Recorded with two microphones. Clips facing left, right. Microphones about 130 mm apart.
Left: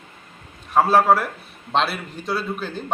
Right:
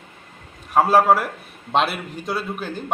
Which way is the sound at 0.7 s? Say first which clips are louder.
Right 1 dB; 10° right (ahead or behind).